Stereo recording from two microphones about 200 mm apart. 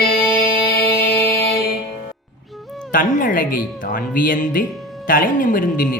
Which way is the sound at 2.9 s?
40° left (ahead or behind).